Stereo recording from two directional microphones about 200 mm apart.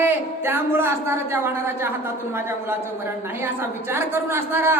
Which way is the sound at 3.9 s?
10° right (ahead or behind).